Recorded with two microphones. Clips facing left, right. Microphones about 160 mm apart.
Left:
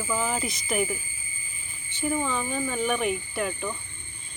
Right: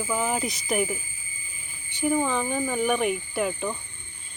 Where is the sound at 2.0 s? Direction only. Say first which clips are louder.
Right 3 dB; 15° right (ahead or behind).